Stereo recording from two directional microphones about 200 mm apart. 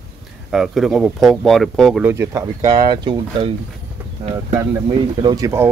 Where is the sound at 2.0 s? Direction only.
15° right (ahead or behind).